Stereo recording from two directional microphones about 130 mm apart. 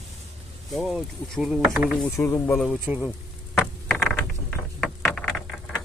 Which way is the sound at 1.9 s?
15° left (ahead or behind).